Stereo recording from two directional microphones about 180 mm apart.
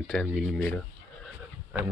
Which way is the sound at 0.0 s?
5° left (ahead or behind).